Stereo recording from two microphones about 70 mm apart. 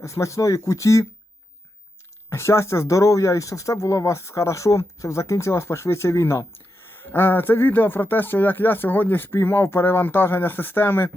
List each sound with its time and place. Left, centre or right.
0.0 s speech: left
2.3 s speech: left
7.0 s speech: left